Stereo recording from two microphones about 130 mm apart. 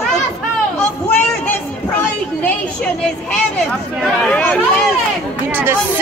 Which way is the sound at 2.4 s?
10° left (ahead or behind).